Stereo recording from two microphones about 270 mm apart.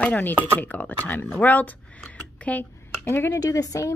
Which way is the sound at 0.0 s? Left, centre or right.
Centre.